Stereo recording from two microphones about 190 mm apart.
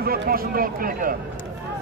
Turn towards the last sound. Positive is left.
turn(degrees=-50)  # may be behind; listen again after turning